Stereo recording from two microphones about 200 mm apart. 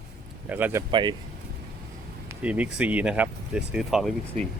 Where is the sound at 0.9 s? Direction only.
20° right (ahead or behind).